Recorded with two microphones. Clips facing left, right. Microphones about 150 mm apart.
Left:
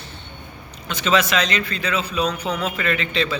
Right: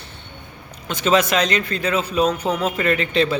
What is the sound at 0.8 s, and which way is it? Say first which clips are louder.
A man's voice: right 2 dB; 45° right (ahead or behind).